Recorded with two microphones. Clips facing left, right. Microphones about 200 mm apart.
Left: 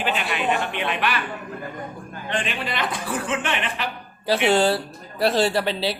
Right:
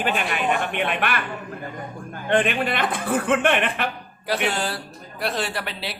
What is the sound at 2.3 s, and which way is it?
A man's voice, 55° right (ahead or behind).